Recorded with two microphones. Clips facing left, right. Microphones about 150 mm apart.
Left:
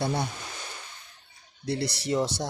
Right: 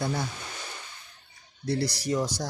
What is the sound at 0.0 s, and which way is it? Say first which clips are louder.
Speech: left 2 dB; 30° left (ahead or behind).